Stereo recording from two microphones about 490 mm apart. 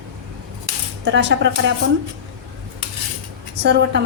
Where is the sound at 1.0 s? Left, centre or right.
Right.